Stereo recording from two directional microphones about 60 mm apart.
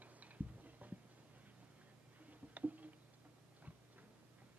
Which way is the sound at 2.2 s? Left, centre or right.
Right.